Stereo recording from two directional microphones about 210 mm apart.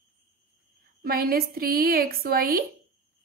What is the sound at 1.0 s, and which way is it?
A woman's voice, 45° right (ahead or behind).